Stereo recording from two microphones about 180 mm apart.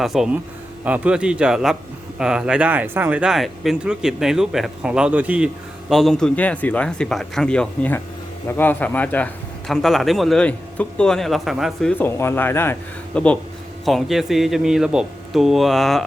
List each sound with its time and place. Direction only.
0.0 s a man's voice: centre (ahead or behind)